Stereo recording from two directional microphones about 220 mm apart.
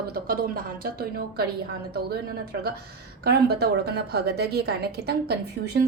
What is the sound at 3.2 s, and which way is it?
A woman's voice, 45° right (ahead or behind).